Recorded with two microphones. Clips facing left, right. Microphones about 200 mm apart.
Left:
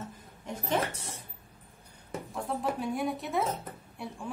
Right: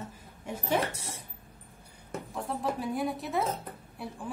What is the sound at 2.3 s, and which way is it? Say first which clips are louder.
A woman's voice: even; centre (ahead or behind).